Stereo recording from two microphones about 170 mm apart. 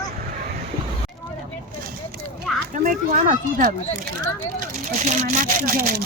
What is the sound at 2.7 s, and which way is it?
Speech, 50° right (ahead or behind).